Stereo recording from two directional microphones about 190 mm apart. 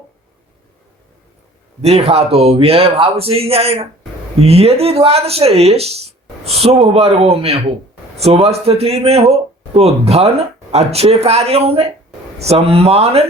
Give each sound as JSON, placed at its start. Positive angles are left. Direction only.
{"t": 1.8, "sound": "speech", "side_deg": -35}